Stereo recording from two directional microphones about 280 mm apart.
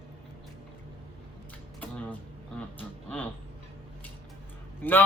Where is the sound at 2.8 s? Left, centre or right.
Centre.